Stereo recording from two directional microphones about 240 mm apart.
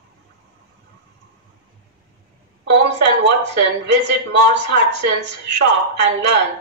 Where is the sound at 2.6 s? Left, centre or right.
Right.